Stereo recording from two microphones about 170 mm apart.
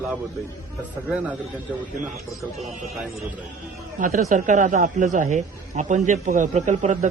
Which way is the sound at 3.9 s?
50° right (ahead or behind).